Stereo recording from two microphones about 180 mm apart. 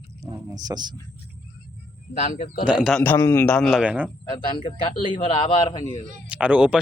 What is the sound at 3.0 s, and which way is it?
Speech, 10° left (ahead or behind).